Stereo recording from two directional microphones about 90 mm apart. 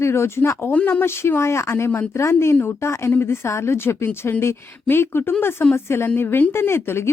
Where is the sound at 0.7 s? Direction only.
20° left (ahead or behind).